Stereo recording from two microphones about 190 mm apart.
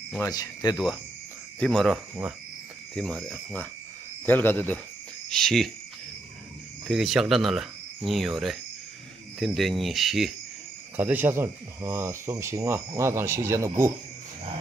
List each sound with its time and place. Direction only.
0.2 s speech: 20° left (ahead or behind)
1.6 s speech: 5° left (ahead or behind)
3.2 s speech: 5° left (ahead or behind)
6.9 s speech: centre (ahead or behind)